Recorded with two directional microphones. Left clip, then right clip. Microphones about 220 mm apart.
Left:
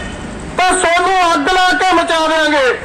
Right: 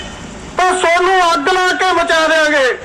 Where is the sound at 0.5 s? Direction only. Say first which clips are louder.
Even; 55° right (ahead or behind); by 2.6 s 40° right (ahead or behind).